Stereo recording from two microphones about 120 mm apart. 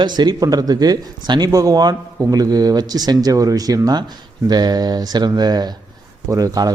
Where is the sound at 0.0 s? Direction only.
35° right (ahead or behind).